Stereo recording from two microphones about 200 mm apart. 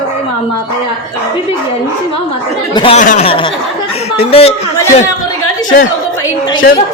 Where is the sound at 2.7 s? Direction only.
25° left (ahead or behind).